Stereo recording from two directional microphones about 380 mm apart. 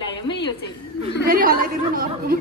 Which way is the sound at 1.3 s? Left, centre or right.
Right.